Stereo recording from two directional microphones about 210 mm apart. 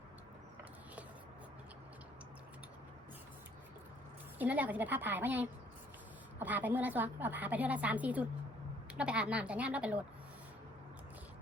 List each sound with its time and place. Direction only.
4.4 s a woman's voice: 10° right (ahead or behind)